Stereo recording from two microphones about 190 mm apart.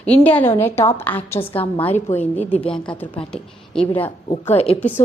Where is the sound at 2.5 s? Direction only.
5° left (ahead or behind).